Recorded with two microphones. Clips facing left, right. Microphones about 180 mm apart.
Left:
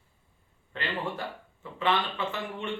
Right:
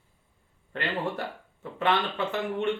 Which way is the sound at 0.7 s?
55° right (ahead or behind).